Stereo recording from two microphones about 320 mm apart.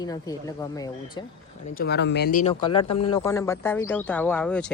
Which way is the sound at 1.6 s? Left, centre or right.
Left.